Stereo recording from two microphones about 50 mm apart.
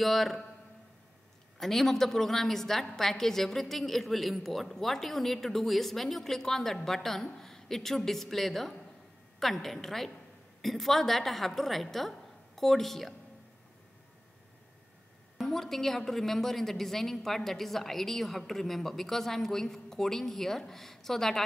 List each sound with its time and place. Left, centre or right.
0.0 s a woman's voice: centre
1.6 s a woman's voice: centre
15.3 s a woman's voice: centre